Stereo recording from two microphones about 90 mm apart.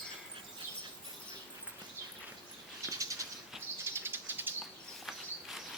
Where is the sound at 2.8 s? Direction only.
35° right (ahead or behind).